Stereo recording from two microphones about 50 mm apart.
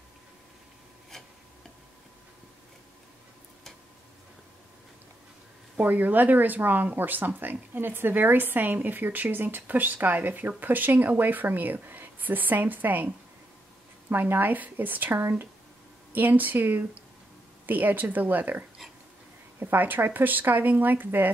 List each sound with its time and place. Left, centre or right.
5.8 s speech: right
15.1 s speech: right
16.1 s speech: right